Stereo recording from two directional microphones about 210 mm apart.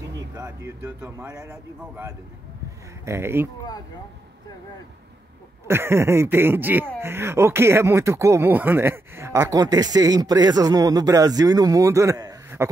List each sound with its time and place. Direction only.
0.4 s speech: 15° right (ahead or behind)
5.7 s speech: 10° right (ahead or behind)